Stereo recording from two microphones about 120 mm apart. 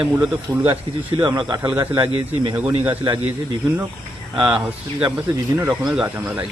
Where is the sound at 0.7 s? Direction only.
40° right (ahead or behind).